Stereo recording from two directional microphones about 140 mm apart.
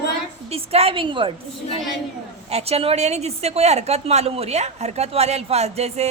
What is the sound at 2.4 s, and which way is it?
A woman's voice, 45° right (ahead or behind).